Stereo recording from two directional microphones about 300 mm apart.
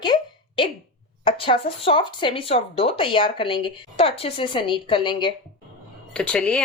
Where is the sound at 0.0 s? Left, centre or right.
Centre.